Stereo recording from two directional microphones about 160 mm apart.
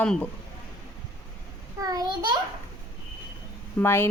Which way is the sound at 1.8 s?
25° right (ahead or behind).